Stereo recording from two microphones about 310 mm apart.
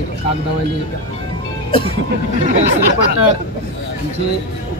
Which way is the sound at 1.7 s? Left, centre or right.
Centre.